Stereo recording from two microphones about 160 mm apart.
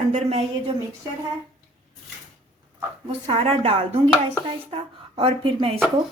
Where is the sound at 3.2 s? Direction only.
40° right (ahead or behind).